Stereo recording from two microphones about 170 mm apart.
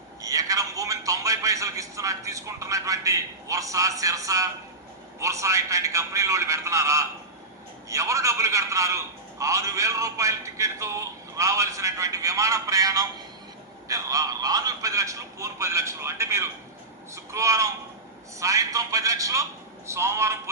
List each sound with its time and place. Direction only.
0.2 s a man's voice: 20° right (ahead or behind)